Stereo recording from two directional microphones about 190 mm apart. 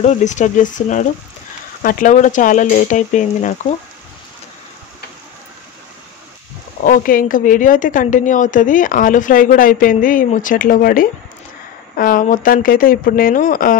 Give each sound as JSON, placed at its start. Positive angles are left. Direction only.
{"t": 0.0, "sound": "speech", "side_deg": 40}
{"t": 6.8, "sound": "a woman's voice", "side_deg": 45}